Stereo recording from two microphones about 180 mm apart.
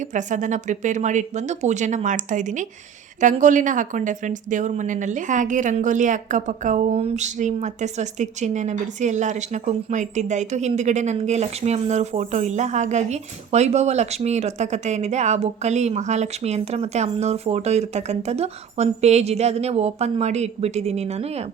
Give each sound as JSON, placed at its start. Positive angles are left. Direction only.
{"t": 0.0, "sound": "a woman's voice", "side_deg": -45}